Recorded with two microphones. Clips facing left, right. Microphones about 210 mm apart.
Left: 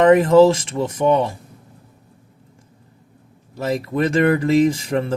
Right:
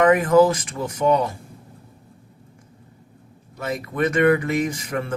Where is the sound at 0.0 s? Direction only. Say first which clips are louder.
Left 4 dB; 25° left (ahead or behind).